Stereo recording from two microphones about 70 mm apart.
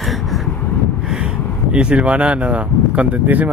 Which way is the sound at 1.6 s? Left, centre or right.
Centre.